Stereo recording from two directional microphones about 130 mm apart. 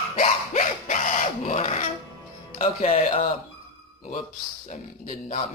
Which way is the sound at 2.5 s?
55° left (ahead or behind).